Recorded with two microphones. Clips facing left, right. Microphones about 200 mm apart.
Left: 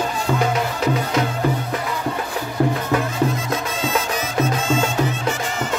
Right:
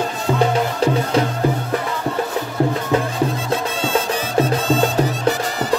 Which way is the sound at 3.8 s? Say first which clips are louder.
Right 2 dB; 30° right (ahead or behind).